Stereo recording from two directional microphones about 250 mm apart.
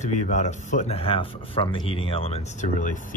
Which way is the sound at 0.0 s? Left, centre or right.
Left.